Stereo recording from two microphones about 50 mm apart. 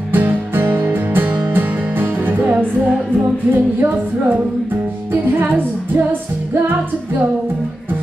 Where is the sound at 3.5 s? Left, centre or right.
Right.